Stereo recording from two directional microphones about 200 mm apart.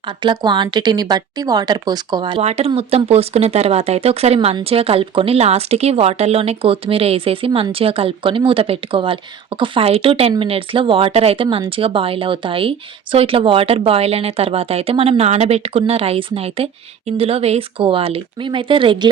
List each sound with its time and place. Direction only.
0.2 s speech: 25° right (ahead or behind)